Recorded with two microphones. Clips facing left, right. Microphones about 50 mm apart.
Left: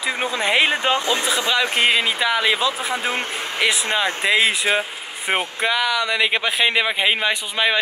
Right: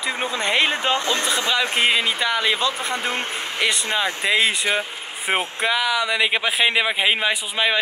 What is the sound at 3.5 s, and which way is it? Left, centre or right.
Speech, centre.